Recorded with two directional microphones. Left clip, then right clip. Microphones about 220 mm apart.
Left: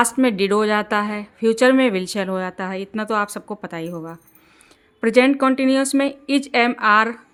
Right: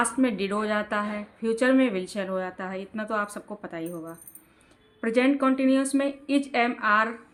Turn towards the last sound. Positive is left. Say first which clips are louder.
# left 7 dB
turn(degrees=55)  # may be behind; listen again after turning